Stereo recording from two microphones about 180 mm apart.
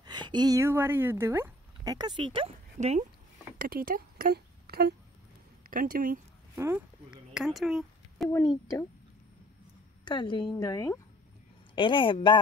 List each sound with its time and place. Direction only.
0.0 s speech: 25° right (ahead or behind)
3.5 s speech: 55° right (ahead or behind)
5.7 s speech: 50° right (ahead or behind)
6.5 s speech: 10° right (ahead or behind)
8.3 s speech: 15° left (ahead or behind)
10.0 s a woman's voice: 25° left (ahead or behind)